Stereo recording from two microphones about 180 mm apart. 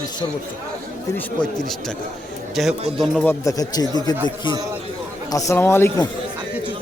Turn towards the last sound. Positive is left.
turn(degrees=15)  # may be behind; listen again after turning